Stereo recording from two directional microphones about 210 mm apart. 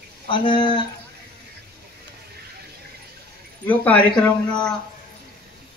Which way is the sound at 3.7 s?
5° left (ahead or behind).